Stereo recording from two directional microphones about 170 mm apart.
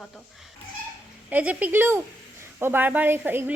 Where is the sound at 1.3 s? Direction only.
10° right (ahead or behind).